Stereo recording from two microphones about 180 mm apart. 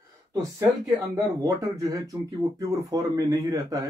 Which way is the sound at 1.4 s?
20° right (ahead or behind).